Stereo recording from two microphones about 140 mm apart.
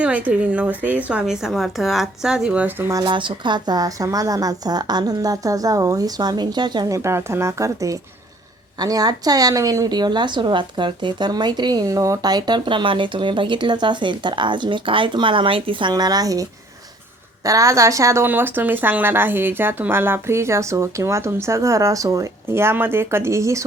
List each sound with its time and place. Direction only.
0.0 s a woman's voice: 10° right (ahead or behind)
3.0 s a woman's voice: 35° right (ahead or behind)